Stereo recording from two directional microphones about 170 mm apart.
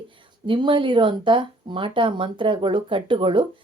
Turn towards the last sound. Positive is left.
turn(degrees=-30)  # may be behind; listen again after turning